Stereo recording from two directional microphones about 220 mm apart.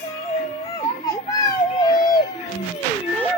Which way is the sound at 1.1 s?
15° left (ahead or behind).